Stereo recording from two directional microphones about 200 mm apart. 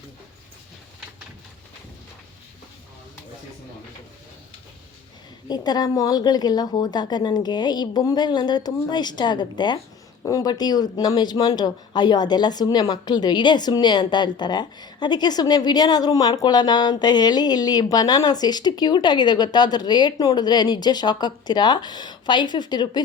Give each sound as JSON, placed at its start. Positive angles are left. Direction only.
{"t": 5.5, "sound": "speech", "side_deg": 20}